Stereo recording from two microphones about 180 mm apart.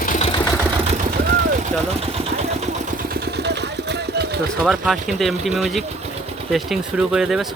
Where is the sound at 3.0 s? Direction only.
60° right (ahead or behind).